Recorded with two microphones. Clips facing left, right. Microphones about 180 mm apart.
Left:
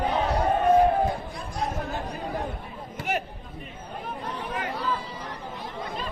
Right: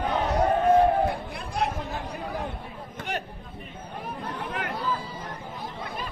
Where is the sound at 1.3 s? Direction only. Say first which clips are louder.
Right 2 dB; 65° right (ahead or behind).